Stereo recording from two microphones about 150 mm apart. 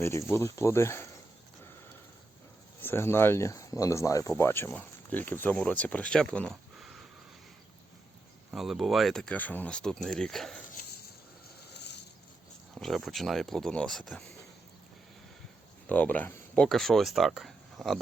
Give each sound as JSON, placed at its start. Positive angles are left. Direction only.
{"t": 0.0, "sound": "speech", "side_deg": 15}
{"t": 2.8, "sound": "speech", "side_deg": 15}
{"t": 8.4, "sound": "speech", "side_deg": 0}
{"t": 12.7, "sound": "speech", "side_deg": 0}
{"t": 15.9, "sound": "speech", "side_deg": 10}